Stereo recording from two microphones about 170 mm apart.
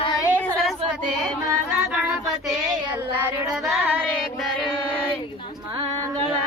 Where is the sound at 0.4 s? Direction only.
5° left (ahead or behind).